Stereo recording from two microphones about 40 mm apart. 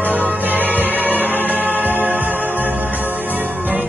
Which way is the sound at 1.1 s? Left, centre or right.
Left.